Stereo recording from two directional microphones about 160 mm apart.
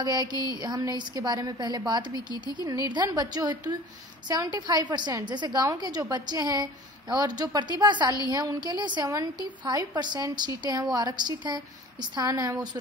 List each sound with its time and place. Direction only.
0.0 s a woman's voice: 25° right (ahead or behind)